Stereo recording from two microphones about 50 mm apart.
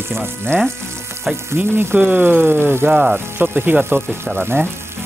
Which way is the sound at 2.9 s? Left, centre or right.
Centre.